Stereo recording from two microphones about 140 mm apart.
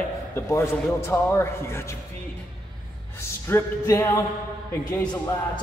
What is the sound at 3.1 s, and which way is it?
A man's voice, 20° left (ahead or behind).